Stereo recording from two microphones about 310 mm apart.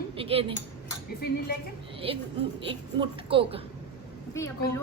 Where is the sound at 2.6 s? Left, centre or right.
Centre.